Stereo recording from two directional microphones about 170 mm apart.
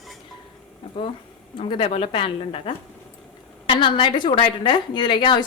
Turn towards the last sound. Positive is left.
turn(degrees=25)  # may be behind; listen again after turning